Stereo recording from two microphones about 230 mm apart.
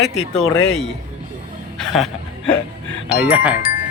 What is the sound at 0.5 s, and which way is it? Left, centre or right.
Speech, left.